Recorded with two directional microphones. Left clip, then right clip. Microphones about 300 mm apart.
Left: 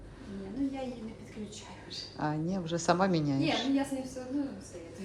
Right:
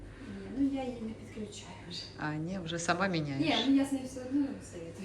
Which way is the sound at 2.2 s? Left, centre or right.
Centre.